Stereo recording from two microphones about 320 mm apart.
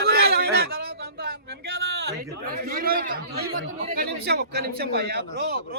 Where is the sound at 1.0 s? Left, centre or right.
Right.